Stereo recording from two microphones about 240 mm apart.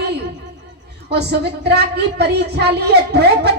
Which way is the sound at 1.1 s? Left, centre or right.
Right.